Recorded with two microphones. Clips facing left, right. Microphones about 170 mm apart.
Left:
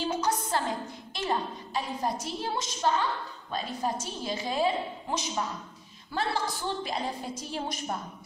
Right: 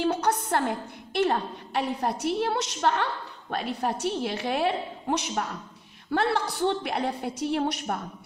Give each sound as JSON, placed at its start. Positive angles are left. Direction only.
{"t": 0.0, "sound": "a woman's voice", "side_deg": -65}